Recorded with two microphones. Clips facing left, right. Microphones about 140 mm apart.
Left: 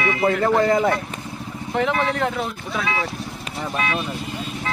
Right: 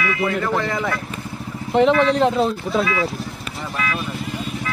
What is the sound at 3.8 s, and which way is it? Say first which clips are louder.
Speech: even; 25° left (ahead or behind).